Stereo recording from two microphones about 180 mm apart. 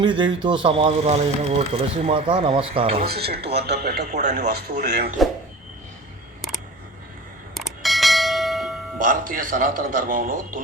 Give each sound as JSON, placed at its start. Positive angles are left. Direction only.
{"t": 0.0, "sound": "speech", "side_deg": -25}
{"t": 3.0, "sound": "speech", "side_deg": -60}
{"t": 4.7, "sound": "a man's voice", "side_deg": -45}
{"t": 5.2, "sound": "speech", "side_deg": 0}
{"t": 7.5, "sound": "bell", "side_deg": 0}
{"t": 9.0, "sound": "a man's voice", "side_deg": -50}